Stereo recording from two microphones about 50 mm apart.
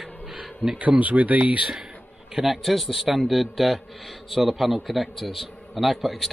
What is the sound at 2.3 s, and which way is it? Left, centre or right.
Speech, centre.